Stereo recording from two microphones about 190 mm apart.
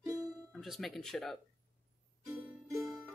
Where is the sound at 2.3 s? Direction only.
15° right (ahead or behind).